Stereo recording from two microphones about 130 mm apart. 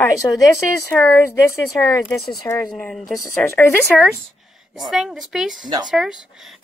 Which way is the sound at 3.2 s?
20° left (ahead or behind).